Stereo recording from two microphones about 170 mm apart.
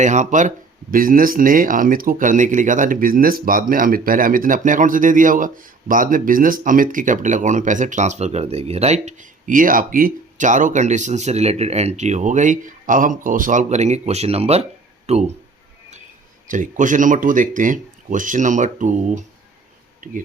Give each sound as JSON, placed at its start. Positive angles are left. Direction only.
{"t": 0.0, "sound": "speech", "side_deg": -45}
{"t": 16.5, "sound": "speech", "side_deg": -50}